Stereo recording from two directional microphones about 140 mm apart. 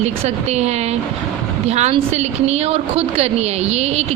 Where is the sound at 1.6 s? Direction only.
50° right (ahead or behind).